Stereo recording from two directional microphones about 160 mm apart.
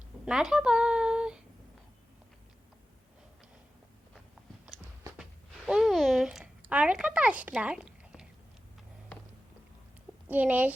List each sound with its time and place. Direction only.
0.3 s speech: 5° right (ahead or behind)
5.6 s a sound: centre (ahead or behind)
10.2 s speech: 10° right (ahead or behind)